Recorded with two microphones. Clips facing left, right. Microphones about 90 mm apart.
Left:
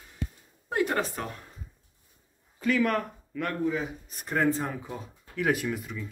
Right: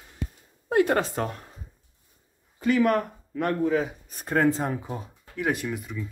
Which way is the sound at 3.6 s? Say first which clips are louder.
Right 4 dB; 75° right (ahead or behind).